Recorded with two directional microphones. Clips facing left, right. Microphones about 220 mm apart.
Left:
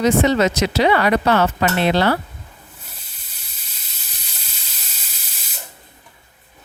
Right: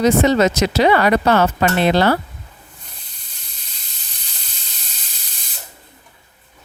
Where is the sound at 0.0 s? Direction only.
40° right (ahead or behind).